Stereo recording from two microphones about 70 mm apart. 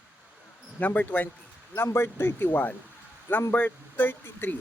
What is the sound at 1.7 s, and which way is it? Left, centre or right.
A man's voice, left.